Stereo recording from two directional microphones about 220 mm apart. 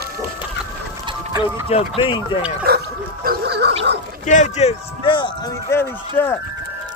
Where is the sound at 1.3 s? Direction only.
10° right (ahead or behind).